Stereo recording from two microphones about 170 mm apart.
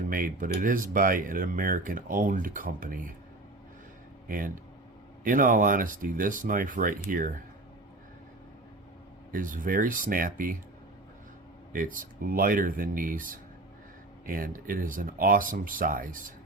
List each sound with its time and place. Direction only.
0.1 s speech: 55° right (ahead or behind)
4.3 s speech: 55° right (ahead or behind)
9.3 s speech: 50° right (ahead or behind)
11.7 s speech: 55° right (ahead or behind)